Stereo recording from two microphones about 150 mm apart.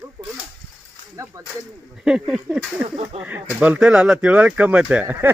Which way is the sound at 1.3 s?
20° right (ahead or behind).